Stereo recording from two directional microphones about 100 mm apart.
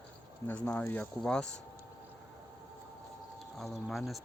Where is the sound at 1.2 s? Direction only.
5° left (ahead or behind).